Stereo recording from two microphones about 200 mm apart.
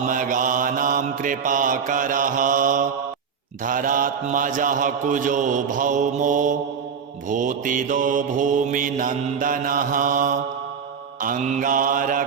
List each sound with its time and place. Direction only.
0.0 s mantra: 40° right (ahead or behind)